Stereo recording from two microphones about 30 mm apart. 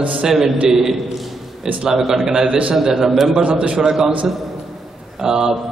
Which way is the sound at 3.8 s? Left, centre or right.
Centre.